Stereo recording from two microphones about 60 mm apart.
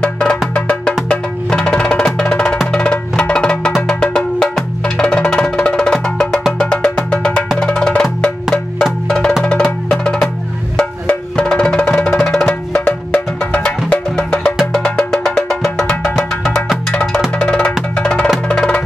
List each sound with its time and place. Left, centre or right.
0.0 s music: centre
1.5 s percussion: centre
4.0 s cowbell: centre
4.8 s music: centre
7.6 s percussion: centre
10.8 s music: centre
17.4 s drum: centre
17.9 s percussion: centre
18.5 s music: centre